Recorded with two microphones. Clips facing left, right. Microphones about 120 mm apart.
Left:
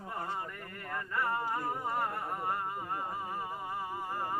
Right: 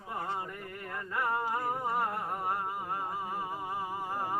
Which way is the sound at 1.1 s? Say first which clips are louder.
Right 2 dB; 15° right (ahead or behind).